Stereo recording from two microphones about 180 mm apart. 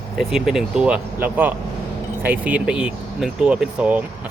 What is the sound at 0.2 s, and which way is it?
Speech, centre (ahead or behind).